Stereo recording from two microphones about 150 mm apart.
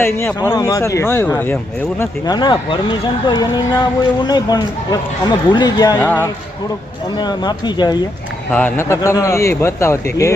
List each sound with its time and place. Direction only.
0.0 s a man's voice: 15° left (ahead or behind)
2.2 s speech: 30° left (ahead or behind)
6.0 s a man's voice: 10° left (ahead or behind)
7.2 s speech: 30° left (ahead or behind)
8.5 s a man's voice: 15° left (ahead or behind)